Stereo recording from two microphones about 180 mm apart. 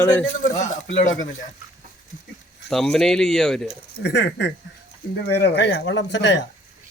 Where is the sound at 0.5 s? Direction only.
40° left (ahead or behind).